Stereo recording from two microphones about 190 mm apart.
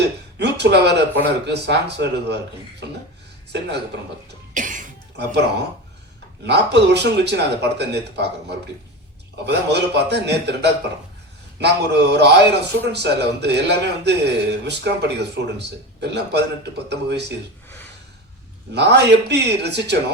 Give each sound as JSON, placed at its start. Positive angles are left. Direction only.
{"t": 0.3, "sound": "a man's voice", "side_deg": -65}
{"t": 4.5, "sound": "cough", "side_deg": -45}
{"t": 5.1, "sound": "a man's voice", "side_deg": -60}
{"t": 18.7, "sound": "a man's voice", "side_deg": -65}